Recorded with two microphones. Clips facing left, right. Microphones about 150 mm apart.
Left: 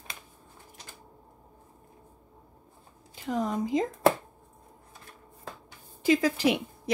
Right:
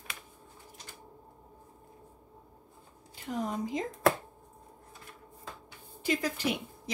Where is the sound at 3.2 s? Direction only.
90° left.